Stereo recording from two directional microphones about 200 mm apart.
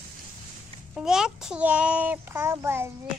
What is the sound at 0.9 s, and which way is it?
A child's voice, 5° right (ahead or behind).